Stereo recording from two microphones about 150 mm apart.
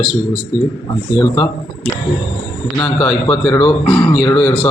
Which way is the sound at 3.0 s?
25° left (ahead or behind).